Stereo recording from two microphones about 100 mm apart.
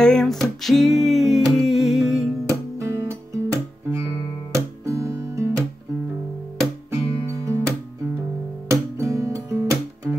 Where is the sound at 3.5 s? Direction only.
25° right (ahead or behind).